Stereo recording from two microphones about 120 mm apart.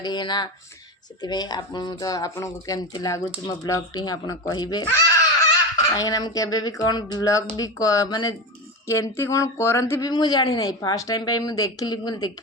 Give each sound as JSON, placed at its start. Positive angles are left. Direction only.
{"t": 0.0, "sound": "speech", "side_deg": 40}
{"t": 5.9, "sound": "speech", "side_deg": 30}
{"t": 8.9, "sound": "speech", "side_deg": 25}
{"t": 10.1, "sound": "speech", "side_deg": 35}